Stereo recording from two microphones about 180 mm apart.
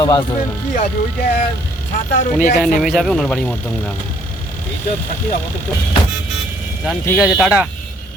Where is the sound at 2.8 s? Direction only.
Centre (ahead or behind).